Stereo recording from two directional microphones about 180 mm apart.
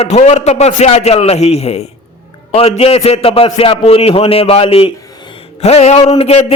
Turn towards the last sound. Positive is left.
turn(degrees=35)  # may be behind; listen again after turning